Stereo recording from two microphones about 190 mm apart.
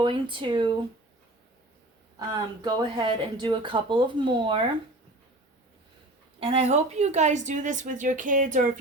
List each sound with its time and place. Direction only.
0.0 s speech: 25° right (ahead or behind)
2.1 s speech: 20° right (ahead or behind)
6.4 s a woman's voice: 30° right (ahead or behind)